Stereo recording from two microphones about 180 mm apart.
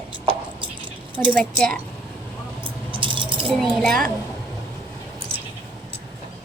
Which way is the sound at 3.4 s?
Centre (ahead or behind).